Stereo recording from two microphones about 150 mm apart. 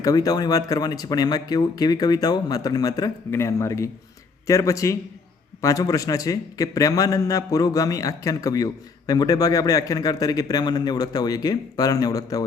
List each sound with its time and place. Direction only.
0.0 s a man's voice: 25° left (ahead or behind)